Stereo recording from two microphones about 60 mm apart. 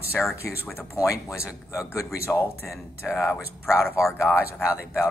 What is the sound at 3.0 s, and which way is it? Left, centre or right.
Speech, centre.